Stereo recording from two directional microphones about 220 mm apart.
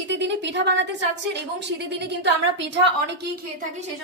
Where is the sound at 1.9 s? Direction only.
50° right (ahead or behind).